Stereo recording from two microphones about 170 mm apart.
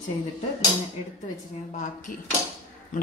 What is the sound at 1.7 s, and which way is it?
Speech, 50° left (ahead or behind).